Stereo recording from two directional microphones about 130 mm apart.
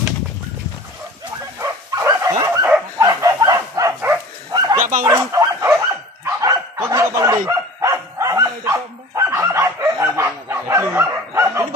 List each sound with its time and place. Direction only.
1.6 s bow-wow: 25° right (ahead or behind)
3.0 s a sound: 25° right (ahead or behind)
4.5 s bow-wow: 30° right (ahead or behind)
6.2 s dog: 25° right (ahead or behind)